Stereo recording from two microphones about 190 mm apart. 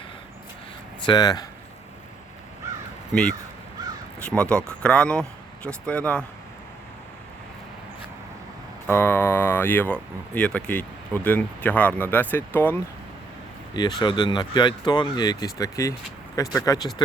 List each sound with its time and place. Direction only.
1.0 s speech: 20° left (ahead or behind)
4.2 s speech: 5° left (ahead or behind)
8.9 s speech: 10° left (ahead or behind)
13.7 s speech: 25° left (ahead or behind)